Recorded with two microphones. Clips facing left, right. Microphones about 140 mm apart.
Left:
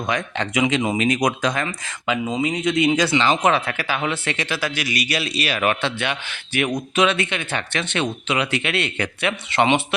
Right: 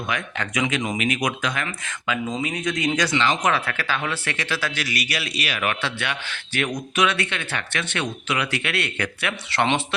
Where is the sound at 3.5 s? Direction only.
20° left (ahead or behind).